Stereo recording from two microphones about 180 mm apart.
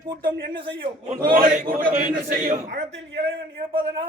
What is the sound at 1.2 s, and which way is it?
A man's voice, 55° right (ahead or behind).